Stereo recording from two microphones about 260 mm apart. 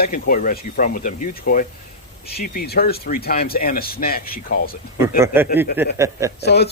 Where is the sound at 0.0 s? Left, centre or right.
Left.